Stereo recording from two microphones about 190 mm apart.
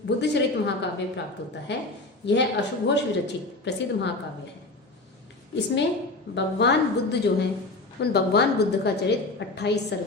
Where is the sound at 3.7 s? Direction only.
65° left (ahead or behind).